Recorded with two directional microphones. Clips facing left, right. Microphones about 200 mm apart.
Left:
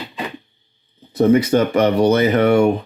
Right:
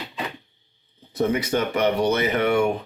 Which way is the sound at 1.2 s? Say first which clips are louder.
Left 8 dB; 35° left (ahead or behind).